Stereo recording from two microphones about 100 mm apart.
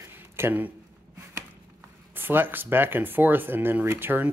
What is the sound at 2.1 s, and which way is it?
Speech, 20° right (ahead or behind).